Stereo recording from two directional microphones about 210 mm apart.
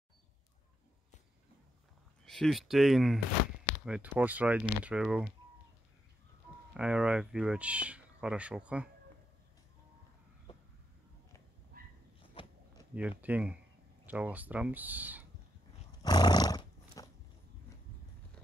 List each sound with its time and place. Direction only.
2.2 s speech: centre (ahead or behind)
6.7 s speech: 5° right (ahead or behind)
11.7 s dog: 45° right (ahead or behind)
12.2 s a sound: 25° left (ahead or behind)
13.2 s speech: 5° right (ahead or behind)
16.0 s roar: 20° left (ahead or behind)